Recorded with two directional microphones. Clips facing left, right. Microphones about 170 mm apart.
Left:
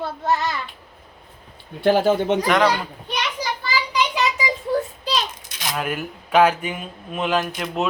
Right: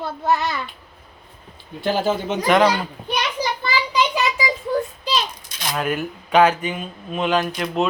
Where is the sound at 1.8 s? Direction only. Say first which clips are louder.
Left 4 dB; 60° left (ahead or behind).